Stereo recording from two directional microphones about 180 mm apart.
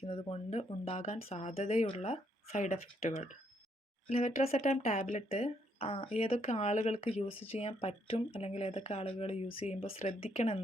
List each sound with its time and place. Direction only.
0.0 s speech: 30° left (ahead or behind)